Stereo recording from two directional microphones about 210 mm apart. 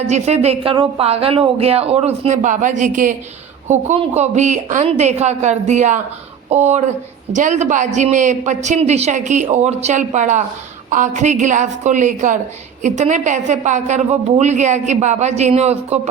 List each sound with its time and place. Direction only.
0.1 s a woman's voice: 30° right (ahead or behind)